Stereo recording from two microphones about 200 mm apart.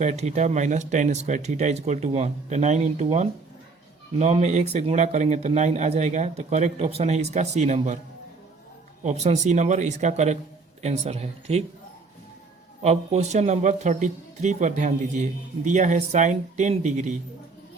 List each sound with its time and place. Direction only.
0.0 s speech: 35° right (ahead or behind)
9.0 s speech: 35° right (ahead or behind)
12.8 s speech: 35° right (ahead or behind)